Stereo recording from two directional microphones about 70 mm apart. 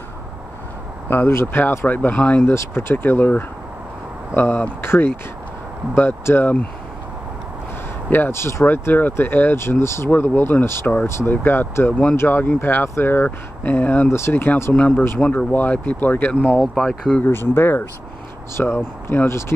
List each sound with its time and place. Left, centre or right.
1.1 s speech: left
2.5 s speech: left
8.1 s speech: left; by 16.6 s centre
16.6 s speech: centre
17.2 s speech: left